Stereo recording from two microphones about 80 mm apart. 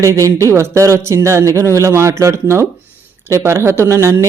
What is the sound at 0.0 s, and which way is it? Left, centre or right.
Speech, right.